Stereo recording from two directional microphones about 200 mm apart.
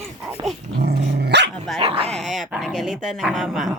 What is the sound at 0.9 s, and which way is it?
Dog, 35° right (ahead or behind).